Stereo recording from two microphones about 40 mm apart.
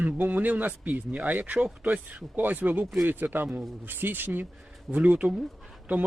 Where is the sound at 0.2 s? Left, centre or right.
Right.